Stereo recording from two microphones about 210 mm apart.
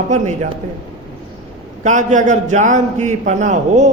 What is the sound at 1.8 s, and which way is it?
A man's voice, 35° right (ahead or behind).